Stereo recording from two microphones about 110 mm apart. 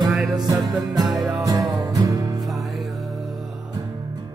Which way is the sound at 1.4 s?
30° right (ahead or behind).